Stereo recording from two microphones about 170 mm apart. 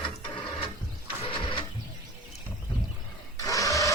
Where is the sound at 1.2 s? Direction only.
30° left (ahead or behind).